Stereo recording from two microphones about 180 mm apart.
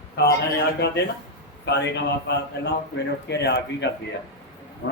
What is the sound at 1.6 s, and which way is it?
A man's voice, 70° left (ahead or behind).